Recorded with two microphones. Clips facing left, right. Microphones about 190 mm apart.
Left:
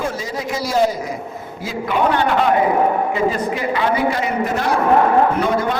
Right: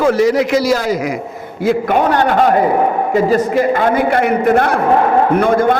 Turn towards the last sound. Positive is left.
turn(degrees=-55)  # may be behind; listen again after turning